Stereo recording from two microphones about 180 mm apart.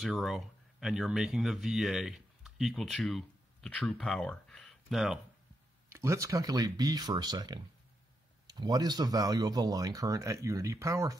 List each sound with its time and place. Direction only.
0.0 s speech: centre (ahead or behind)
5.9 s speech: 15° right (ahead or behind)